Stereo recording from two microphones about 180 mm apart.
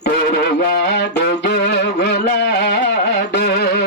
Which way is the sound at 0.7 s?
65° left (ahead or behind).